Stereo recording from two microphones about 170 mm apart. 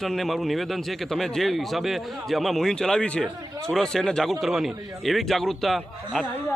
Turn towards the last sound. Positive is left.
turn(degrees=0)  # may be behind; listen again after turning